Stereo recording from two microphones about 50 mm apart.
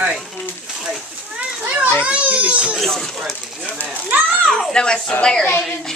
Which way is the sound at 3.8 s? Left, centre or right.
Right.